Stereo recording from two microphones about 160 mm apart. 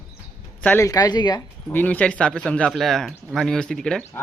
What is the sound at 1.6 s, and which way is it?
Speech, 10° left (ahead or behind).